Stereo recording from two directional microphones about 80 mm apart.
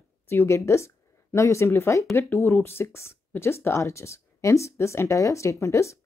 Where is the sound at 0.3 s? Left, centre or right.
Left.